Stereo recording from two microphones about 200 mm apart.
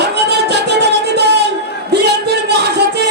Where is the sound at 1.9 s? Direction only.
55° right (ahead or behind).